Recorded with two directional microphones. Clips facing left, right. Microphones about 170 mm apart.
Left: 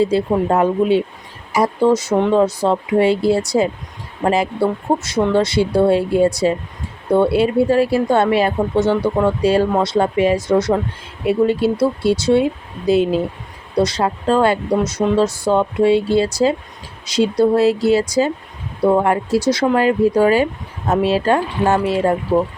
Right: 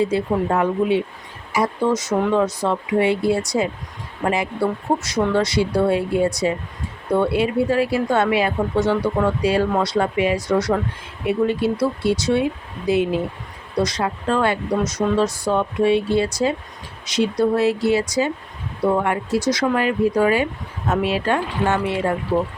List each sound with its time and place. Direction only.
0.0 s speech: 30° left (ahead or behind)